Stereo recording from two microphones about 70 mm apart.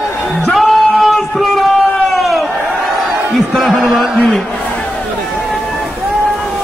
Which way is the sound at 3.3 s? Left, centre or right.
Centre.